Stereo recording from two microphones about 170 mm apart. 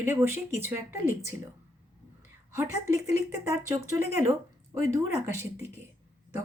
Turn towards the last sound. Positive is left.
turn(degrees=-15)  # may be behind; listen again after turning